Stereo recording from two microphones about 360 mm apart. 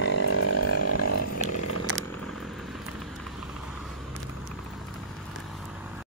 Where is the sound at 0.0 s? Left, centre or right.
Left.